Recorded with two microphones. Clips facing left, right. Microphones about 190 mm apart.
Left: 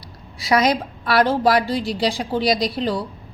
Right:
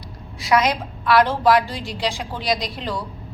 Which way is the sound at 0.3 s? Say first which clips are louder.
Left 1 dB; 35° left (ahead or behind).